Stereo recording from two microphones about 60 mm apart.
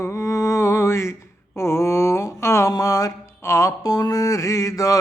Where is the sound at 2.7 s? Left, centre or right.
Left.